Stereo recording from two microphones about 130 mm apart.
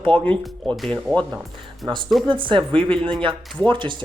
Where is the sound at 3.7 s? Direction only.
40° right (ahead or behind).